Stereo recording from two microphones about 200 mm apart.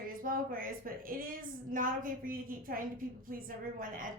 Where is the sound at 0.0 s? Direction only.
45° right (ahead or behind).